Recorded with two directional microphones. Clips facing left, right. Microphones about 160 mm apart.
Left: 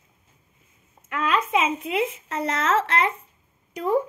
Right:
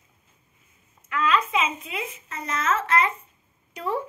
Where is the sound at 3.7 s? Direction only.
45° left (ahead or behind).